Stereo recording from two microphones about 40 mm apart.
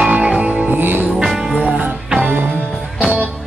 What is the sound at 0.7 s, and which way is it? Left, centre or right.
Music, right.